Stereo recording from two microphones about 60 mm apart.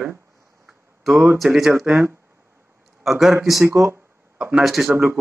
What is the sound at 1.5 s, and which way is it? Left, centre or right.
Speech, centre.